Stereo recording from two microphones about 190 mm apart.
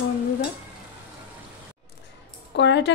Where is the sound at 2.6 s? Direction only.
70° left (ahead or behind).